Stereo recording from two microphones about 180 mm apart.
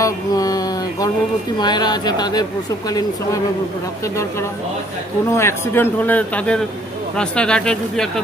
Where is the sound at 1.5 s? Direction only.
25° left (ahead or behind).